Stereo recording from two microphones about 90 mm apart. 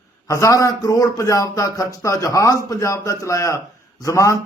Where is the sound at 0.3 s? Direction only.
35° left (ahead or behind).